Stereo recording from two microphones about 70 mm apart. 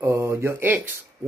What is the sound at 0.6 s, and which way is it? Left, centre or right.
Speech, right.